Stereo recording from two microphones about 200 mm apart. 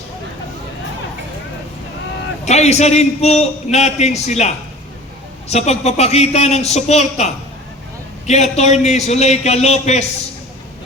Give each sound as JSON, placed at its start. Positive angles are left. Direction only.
{"t": 2.4, "sound": "a man's voice", "side_deg": 35}